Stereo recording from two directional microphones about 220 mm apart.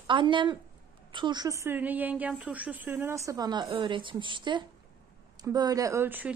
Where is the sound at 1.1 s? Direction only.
20° right (ahead or behind).